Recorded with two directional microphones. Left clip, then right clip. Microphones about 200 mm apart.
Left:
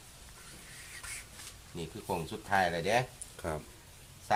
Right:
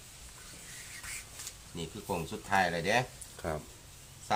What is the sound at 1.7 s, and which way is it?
Speech, 15° left (ahead or behind).